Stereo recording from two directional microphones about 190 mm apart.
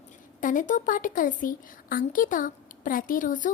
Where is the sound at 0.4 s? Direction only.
45° left (ahead or behind).